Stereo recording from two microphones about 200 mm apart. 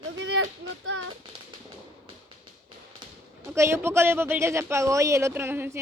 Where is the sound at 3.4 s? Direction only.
15° right (ahead or behind).